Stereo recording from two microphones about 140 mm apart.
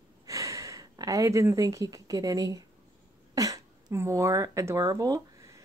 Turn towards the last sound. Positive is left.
turn(degrees=-20)  # may be behind; listen again after turning